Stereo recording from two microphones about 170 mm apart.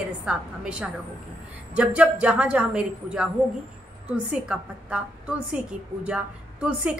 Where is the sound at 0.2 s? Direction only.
5° right (ahead or behind).